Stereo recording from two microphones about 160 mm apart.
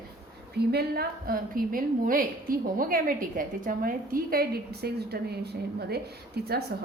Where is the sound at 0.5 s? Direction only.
80° right.